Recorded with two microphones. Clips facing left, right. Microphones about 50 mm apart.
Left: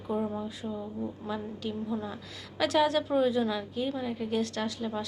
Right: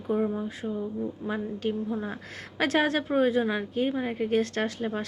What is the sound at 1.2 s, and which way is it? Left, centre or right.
A woman's voice, right.